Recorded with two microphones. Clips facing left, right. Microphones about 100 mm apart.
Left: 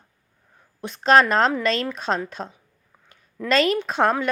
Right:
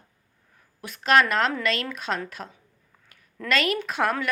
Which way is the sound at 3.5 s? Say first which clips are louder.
Left 5 dB; 30° left (ahead or behind).